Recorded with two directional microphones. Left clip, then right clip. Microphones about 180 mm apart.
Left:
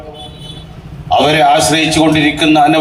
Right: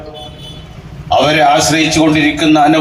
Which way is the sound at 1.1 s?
15° right (ahead or behind).